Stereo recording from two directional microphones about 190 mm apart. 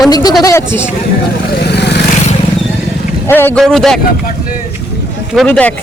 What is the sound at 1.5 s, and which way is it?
Vehicle, 60° left (ahead or behind).